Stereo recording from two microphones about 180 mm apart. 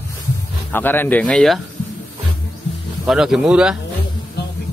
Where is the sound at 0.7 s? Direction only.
10° left (ahead or behind).